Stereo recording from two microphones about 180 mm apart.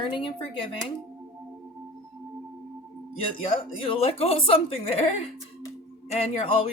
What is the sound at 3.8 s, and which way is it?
Speech, 30° left (ahead or behind).